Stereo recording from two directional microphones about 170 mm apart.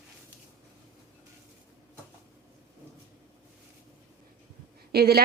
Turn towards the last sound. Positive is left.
turn(degrees=-65)  # may be behind; listen again after turning